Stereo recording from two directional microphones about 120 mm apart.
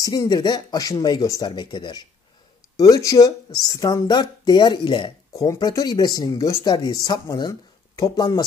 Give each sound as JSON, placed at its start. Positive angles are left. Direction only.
{"t": 0.0, "sound": "speech", "side_deg": 35}
{"t": 5.3, "sound": "speech", "side_deg": 25}